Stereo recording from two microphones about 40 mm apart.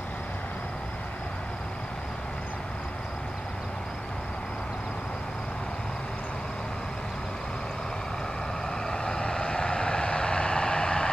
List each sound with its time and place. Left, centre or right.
8.9 s vehicle: centre